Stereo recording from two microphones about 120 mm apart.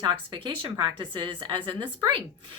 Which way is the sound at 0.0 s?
40° right (ahead or behind).